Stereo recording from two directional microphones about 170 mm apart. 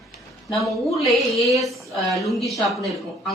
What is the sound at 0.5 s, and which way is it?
Speech, centre (ahead or behind).